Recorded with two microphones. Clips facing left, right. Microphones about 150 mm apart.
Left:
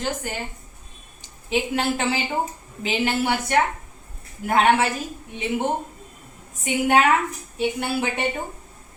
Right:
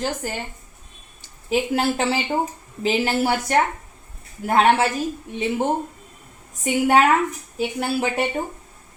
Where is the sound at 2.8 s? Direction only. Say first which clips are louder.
Right 2 dB; 40° right (ahead or behind).